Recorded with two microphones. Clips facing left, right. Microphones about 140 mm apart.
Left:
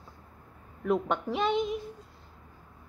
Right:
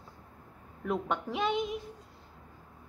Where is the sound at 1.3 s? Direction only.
10° right (ahead or behind).